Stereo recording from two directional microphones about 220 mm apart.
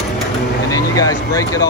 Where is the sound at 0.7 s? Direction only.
15° left (ahead or behind).